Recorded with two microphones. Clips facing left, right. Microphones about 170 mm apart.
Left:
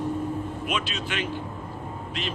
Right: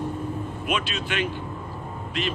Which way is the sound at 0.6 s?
60° right (ahead or behind).